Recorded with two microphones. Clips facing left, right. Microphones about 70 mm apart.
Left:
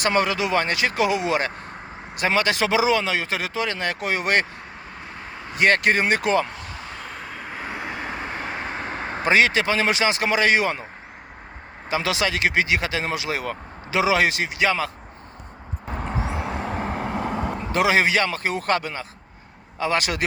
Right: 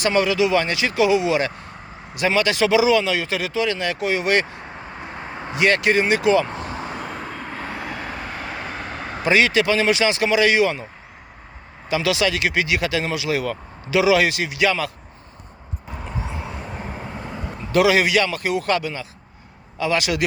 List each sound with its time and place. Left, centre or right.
0.0 s speech: left
5.1 s a sound: right
5.5 s speech: left
6.5 s vehicle: right
6.9 s vehicle: centre; by 10.8 s left
11.9 s speech: left
15.9 s vehicle: left
17.7 s speech: left